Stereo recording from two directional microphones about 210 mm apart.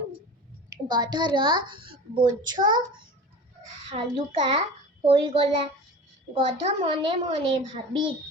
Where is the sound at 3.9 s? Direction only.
30° right (ahead or behind).